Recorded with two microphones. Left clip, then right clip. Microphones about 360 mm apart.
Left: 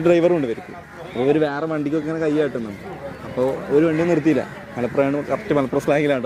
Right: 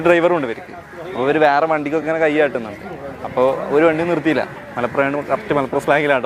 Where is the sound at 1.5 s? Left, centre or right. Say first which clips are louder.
Right 8 dB; right.